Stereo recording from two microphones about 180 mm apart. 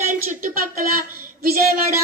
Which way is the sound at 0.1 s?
50° right (ahead or behind).